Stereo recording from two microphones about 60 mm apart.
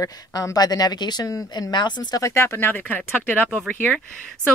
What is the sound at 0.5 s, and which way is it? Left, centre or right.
Speech, left.